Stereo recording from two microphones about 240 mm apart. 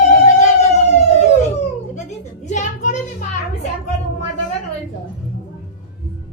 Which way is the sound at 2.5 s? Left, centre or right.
Left.